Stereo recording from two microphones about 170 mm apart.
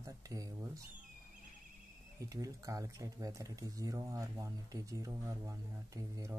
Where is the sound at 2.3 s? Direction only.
20° right (ahead or behind).